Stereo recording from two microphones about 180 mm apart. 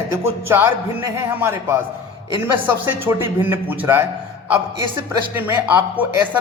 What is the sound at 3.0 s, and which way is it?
A man's voice, 15° right (ahead or behind).